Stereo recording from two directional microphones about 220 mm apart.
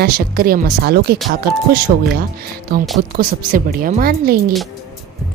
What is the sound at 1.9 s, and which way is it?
Speech, 35° right (ahead or behind).